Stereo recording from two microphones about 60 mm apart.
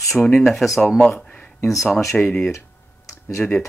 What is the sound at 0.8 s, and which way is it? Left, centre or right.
Speech, centre.